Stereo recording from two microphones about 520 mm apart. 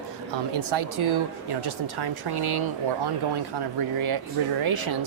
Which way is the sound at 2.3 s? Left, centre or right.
Right.